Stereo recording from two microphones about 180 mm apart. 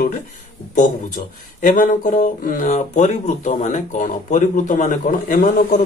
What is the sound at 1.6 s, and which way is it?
Speech, 45° left (ahead or behind).